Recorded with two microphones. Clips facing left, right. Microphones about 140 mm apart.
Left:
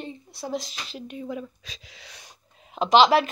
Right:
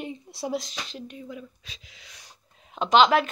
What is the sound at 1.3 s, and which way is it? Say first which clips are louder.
Speech: left 6 dB; 90° left.